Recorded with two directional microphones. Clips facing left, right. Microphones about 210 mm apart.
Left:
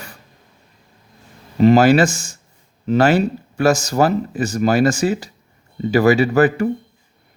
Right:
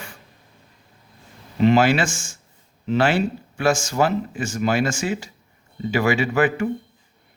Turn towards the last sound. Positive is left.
turn(degrees=40)  # may be behind; listen again after turning